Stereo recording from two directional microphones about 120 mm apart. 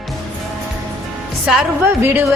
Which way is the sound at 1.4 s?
5° right (ahead or behind).